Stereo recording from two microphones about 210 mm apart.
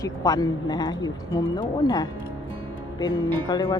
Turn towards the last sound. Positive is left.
turn(degrees=20)  # may be behind; listen again after turning